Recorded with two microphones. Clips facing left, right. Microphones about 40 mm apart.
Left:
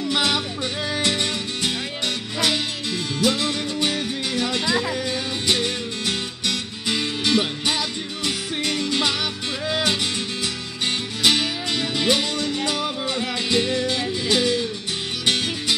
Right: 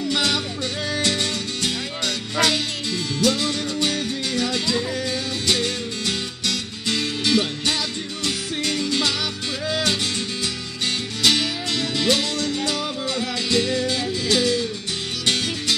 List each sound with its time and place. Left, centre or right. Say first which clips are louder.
0.1 s music: left 2 dB; centre
3.2 s music: even; centre
11.2 s music: even; centre